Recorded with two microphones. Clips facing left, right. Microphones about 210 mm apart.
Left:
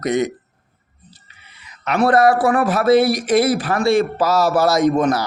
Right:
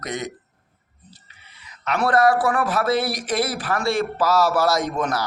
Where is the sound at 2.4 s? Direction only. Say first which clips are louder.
Left 5 dB; 20° left (ahead or behind).